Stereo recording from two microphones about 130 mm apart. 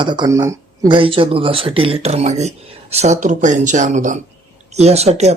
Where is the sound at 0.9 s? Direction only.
40° right (ahead or behind); by 4.2 s 75° right (ahead or behind).